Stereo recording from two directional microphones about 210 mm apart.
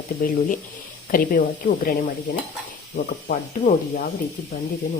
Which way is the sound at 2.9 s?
40° left (ahead or behind).